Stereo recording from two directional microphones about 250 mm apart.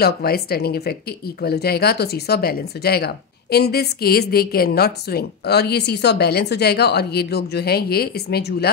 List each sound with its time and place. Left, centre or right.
0.0 s speech: left